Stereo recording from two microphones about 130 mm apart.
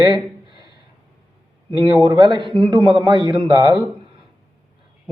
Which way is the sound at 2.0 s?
30° right (ahead or behind).